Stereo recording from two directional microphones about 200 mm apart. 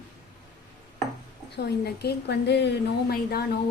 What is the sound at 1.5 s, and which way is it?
A woman's voice, 55° left (ahead or behind).